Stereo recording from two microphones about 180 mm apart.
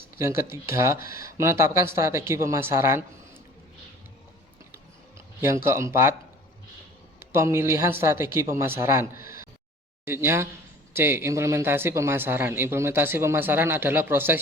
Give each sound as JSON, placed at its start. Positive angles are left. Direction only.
{"t": 0.2, "sound": "a man's voice", "side_deg": -15}
{"t": 4.7, "sound": "a sound", "side_deg": -15}
{"t": 7.2, "sound": "a man's voice", "side_deg": -15}
{"t": 9.1, "sound": "speech", "side_deg": 50}
{"t": 10.1, "sound": "a man's voice", "side_deg": -15}